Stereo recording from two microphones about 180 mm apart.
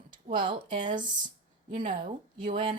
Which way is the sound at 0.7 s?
45° right (ahead or behind).